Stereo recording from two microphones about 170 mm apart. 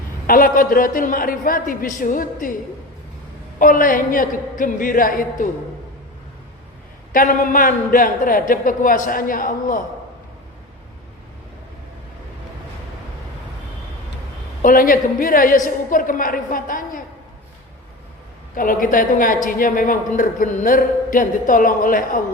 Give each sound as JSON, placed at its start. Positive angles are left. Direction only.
{"t": 0.3, "sound": "a man's voice", "side_deg": 55}
{"t": 3.6, "sound": "a woman's voice", "side_deg": 50}
{"t": 7.1, "sound": "a woman's voice", "side_deg": 55}
{"t": 14.6, "sound": "a woman's voice", "side_deg": 55}
{"t": 18.5, "sound": "a woman's voice", "side_deg": 55}